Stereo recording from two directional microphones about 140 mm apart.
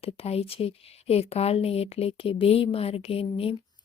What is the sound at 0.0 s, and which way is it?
Speech, 45° left (ahead or behind).